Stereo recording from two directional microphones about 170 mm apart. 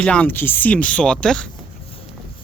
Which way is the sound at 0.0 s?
5° left (ahead or behind).